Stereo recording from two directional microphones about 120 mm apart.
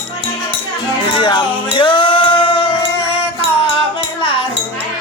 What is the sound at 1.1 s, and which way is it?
Music, 45° left (ahead or behind).